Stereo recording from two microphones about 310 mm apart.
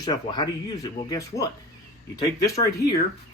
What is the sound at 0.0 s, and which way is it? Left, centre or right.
Speech, centre.